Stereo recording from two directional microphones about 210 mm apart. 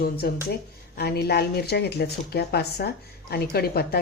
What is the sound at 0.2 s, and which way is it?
Speech, 50° left (ahead or behind).